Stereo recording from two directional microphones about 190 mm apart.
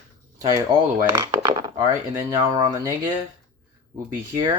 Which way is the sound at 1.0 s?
20° right (ahead or behind).